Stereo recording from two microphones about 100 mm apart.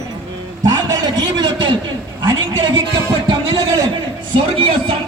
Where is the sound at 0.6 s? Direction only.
45° right (ahead or behind).